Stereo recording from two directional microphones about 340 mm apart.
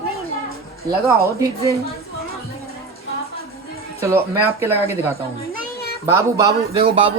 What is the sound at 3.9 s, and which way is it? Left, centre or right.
A man's voice, centre.